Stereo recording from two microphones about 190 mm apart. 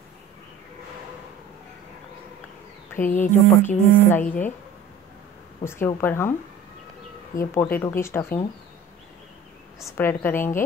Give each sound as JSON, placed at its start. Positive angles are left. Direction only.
{"t": 3.1, "sound": "speech", "side_deg": 40}
{"t": 3.6, "sound": "speech", "side_deg": 10}
{"t": 5.6, "sound": "speech", "side_deg": 15}
{"t": 7.3, "sound": "speech", "side_deg": 10}
{"t": 9.8, "sound": "speech", "side_deg": 15}